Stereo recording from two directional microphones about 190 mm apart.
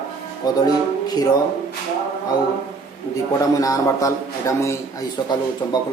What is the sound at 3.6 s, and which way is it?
A man's voice, 15° left (ahead or behind).